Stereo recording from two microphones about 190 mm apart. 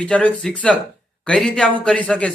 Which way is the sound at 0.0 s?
5° left (ahead or behind).